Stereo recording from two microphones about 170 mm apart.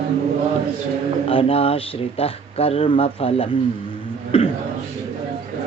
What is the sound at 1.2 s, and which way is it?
Speech, 35° left (ahead or behind).